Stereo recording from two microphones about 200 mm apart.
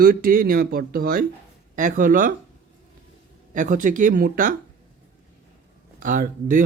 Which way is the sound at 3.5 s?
40° right (ahead or behind).